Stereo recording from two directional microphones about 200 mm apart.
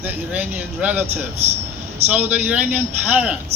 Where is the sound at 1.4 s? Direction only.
30° right (ahead or behind).